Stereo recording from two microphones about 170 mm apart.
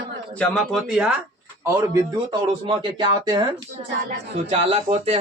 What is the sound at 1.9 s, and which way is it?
Speech, 25° right (ahead or behind).